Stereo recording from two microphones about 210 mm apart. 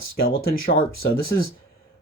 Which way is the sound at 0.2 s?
45° left (ahead or behind).